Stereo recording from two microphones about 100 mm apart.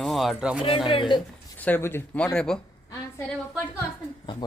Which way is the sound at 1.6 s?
20° left (ahead or behind).